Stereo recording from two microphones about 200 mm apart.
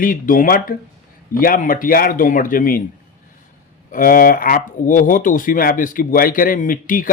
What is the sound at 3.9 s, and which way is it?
Speech, 45° left (ahead or behind).